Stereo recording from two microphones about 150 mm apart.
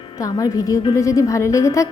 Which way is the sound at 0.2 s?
25° left (ahead or behind).